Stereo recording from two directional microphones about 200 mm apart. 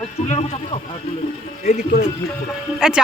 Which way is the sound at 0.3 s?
35° left (ahead or behind).